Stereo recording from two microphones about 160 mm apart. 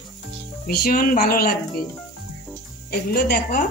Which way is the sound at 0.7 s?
75° left (ahead or behind).